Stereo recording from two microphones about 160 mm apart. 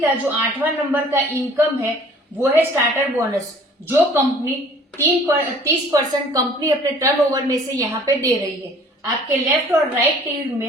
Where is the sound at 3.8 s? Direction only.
15° right (ahead or behind).